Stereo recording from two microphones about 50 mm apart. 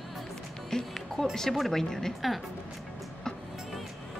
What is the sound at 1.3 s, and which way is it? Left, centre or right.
Speech, centre.